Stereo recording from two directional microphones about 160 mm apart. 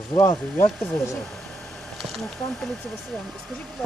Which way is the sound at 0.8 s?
5° left (ahead or behind).